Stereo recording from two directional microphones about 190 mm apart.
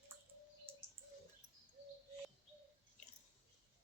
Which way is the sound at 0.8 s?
10° right (ahead or behind).